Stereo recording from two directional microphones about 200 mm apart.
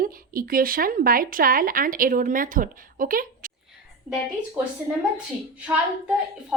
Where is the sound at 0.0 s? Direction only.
45° right (ahead or behind).